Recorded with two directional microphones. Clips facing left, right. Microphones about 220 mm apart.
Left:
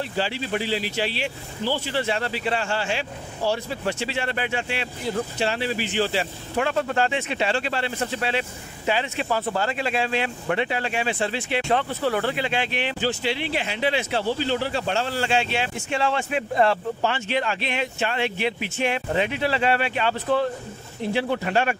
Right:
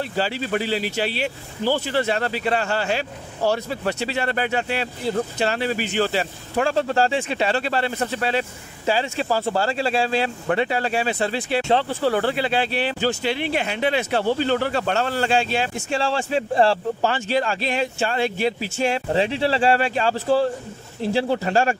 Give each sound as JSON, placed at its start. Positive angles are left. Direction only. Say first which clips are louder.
{"t": 0.2, "sound": "speech", "louder": "right 3 dB", "side_deg": -45}
{"t": 6.7, "sound": "speech", "louder": "right 4 dB", "side_deg": -30}